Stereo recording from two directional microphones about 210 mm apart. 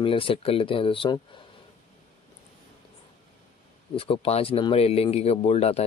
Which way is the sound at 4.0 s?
25° left (ahead or behind).